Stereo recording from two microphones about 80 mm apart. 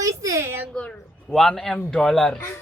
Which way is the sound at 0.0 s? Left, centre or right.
Right.